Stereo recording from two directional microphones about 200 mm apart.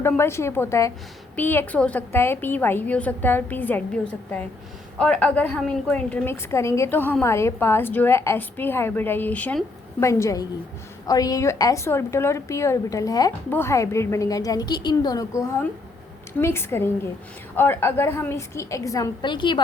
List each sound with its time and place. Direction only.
0.0 s a woman's voice: 10° left (ahead or behind)